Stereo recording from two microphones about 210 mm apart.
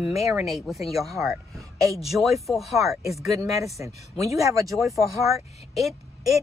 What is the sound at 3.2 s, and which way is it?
Speech, 15° right (ahead or behind).